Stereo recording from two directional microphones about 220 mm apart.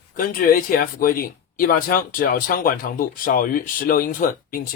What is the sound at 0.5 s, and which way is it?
Speech, 40° left (ahead or behind).